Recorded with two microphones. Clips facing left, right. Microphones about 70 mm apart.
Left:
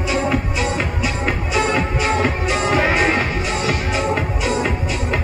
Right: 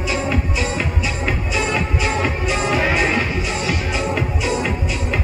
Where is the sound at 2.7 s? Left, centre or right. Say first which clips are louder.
Left 2 dB; left.